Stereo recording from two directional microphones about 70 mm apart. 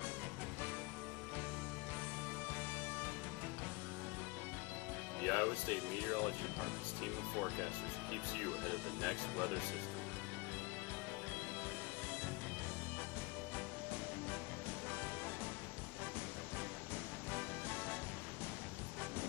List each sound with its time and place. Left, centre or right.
5.2 s music: centre
5.5 s speech: left
17.3 s music: left